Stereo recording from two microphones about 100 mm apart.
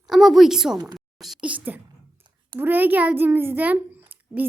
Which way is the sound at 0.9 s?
Centre (ahead or behind).